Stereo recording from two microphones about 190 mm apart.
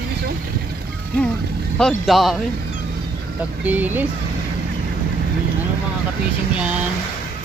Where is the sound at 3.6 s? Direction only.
10° right (ahead or behind).